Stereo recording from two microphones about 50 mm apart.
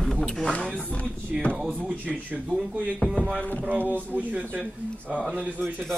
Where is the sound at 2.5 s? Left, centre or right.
Left.